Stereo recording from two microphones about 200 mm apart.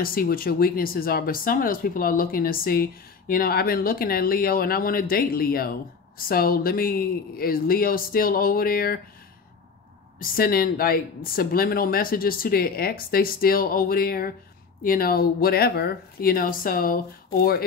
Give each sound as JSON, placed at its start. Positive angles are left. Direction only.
{"t": 0.0, "sound": "speech", "side_deg": 45}
{"t": 10.1, "sound": "speech", "side_deg": 45}